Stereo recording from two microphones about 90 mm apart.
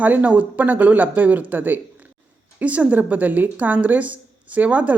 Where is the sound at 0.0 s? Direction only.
15° right (ahead or behind).